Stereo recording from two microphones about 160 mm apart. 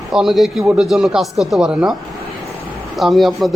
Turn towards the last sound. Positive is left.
turn(degrees=0)  # may be behind; listen again after turning